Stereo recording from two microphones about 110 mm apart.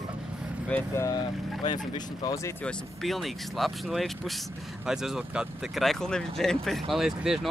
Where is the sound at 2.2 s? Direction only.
30° left (ahead or behind).